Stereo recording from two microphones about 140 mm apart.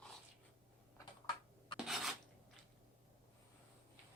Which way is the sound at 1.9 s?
Centre (ahead or behind).